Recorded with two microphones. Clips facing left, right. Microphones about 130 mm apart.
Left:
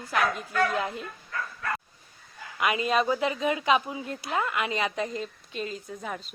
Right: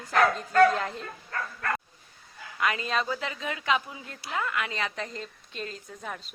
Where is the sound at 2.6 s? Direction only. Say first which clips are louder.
Left 3 dB; 15° left (ahead or behind).